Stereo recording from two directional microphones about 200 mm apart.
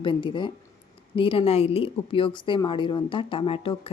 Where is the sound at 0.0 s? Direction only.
25° left (ahead or behind).